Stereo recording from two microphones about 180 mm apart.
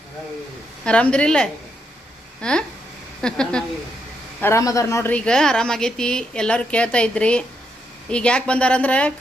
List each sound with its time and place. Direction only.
0.9 s a woman's voice: 5° left (ahead or behind)
5.1 s a woman's voice: 5° left (ahead or behind)